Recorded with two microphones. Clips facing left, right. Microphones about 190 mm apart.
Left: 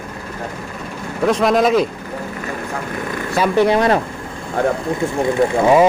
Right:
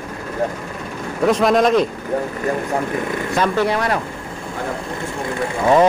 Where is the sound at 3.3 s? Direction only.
15° left (ahead or behind).